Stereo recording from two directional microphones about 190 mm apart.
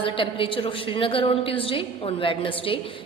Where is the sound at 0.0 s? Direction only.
25° left (ahead or behind).